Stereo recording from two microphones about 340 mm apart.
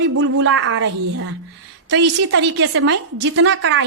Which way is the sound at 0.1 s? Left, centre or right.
Right.